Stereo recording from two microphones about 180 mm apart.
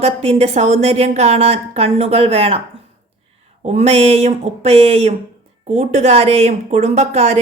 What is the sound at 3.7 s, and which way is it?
A woman's voice, 35° right (ahead or behind).